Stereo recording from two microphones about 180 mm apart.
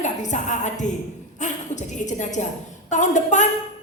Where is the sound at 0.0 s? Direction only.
40° left (ahead or behind).